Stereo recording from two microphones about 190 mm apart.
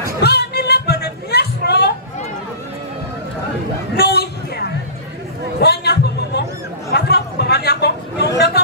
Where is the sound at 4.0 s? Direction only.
60° left (ahead or behind).